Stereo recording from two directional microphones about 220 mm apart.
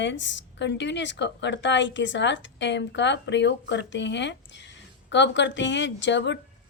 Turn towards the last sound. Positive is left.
turn(degrees=55)  # may be behind; listen again after turning